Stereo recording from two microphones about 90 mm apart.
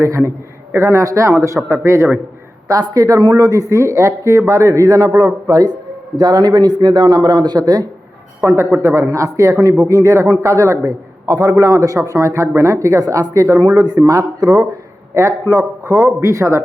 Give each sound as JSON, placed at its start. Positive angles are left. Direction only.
{"t": 0.0, "sound": "a man's voice", "side_deg": -35}
{"t": 2.9, "sound": "a man's voice", "side_deg": -45}
{"t": 8.4, "sound": "a man's voice", "side_deg": -30}
{"t": 13.7, "sound": "a man's voice", "side_deg": -50}
{"t": 15.1, "sound": "a man's voice", "side_deg": -35}